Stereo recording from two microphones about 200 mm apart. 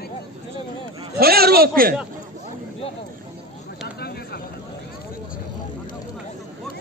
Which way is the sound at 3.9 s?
55° left (ahead or behind).